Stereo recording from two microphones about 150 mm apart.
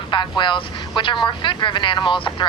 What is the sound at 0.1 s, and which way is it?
Speech, 30° left (ahead or behind).